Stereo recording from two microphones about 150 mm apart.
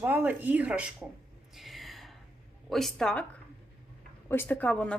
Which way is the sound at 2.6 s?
Centre (ahead or behind).